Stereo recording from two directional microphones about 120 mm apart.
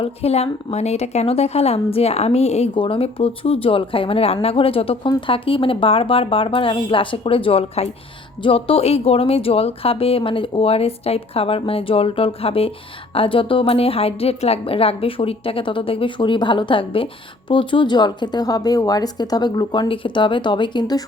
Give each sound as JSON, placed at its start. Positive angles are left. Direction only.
{"t": 0.0, "sound": "a woman's voice", "side_deg": 60}
{"t": 2.7, "sound": "a woman's voice", "side_deg": 45}